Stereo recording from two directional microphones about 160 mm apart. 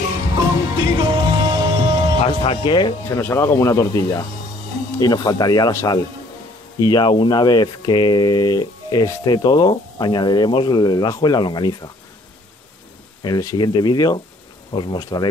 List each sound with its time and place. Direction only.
0.7 s music: 25° right (ahead or behind)
2.2 s speech: 35° left (ahead or behind)
3.2 s speech: 15° left (ahead or behind)
13.2 s speech: 25° left (ahead or behind)